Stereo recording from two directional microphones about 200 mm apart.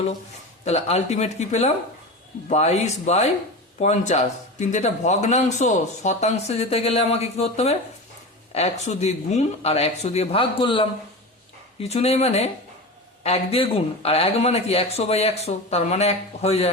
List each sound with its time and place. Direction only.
0.6 s speech: 35° left (ahead or behind)